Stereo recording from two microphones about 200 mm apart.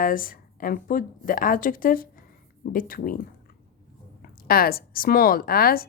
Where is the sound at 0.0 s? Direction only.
45° left (ahead or behind).